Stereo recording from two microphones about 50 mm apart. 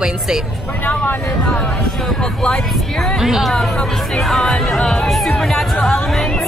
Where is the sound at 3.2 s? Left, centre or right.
Centre.